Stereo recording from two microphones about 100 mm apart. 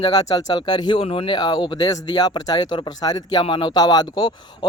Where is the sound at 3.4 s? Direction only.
55° left (ahead or behind).